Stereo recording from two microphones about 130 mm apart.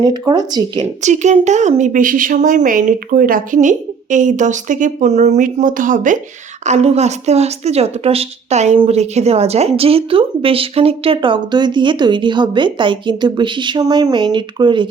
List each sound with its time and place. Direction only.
0.0 s speech: 35° right (ahead or behind)
1.0 s a woman's voice: 65° right (ahead or behind); by 6.1 s 90° right
6.7 s a woman's voice: 55° right (ahead or behind); by 14.8 s 35° right (ahead or behind)